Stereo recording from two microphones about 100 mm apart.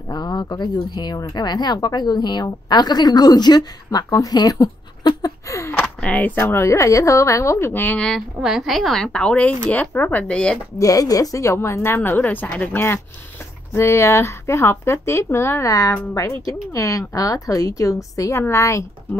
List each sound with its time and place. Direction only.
0.1 s speech: 45° left (ahead or behind); by 5.9 s 30° left (ahead or behind)
5.9 s a woman's voice: 15° left (ahead or behind)
8.4 s a woman's voice: 5° right (ahead or behind); by 10.6 s 10° left (ahead or behind)
10.8 s a woman's voice: 35° left (ahead or behind)